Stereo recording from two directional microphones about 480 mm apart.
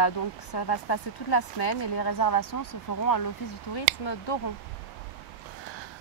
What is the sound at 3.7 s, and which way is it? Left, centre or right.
Speech, left.